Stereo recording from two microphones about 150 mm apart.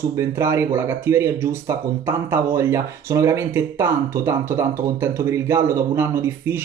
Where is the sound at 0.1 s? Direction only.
20° right (ahead or behind).